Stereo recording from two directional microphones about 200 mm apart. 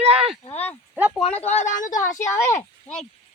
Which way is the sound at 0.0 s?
30° right (ahead or behind).